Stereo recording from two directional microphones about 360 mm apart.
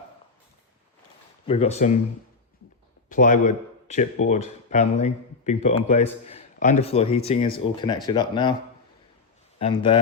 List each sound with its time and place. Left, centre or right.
1.5 s speech: centre
3.1 s speech: left
9.6 s speech: centre